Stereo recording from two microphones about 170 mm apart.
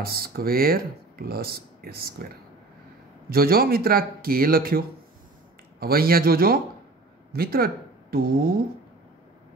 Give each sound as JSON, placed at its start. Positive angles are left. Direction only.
{"t": 0.0, "sound": "speech", "side_deg": -65}
{"t": 3.3, "sound": "speech", "side_deg": -60}